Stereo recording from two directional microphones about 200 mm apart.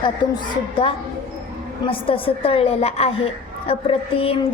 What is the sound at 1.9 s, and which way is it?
A woman's voice, 25° left (ahead or behind).